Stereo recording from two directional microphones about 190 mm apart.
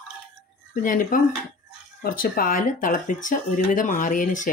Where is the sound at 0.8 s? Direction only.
45° left (ahead or behind).